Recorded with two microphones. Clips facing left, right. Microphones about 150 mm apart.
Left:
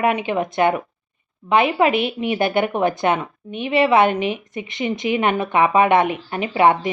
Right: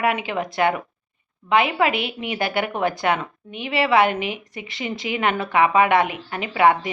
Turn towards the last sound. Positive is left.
turn(degrees=25)  # may be behind; listen again after turning